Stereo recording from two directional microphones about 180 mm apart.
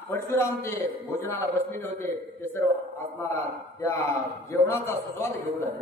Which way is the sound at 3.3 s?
15° left (ahead or behind).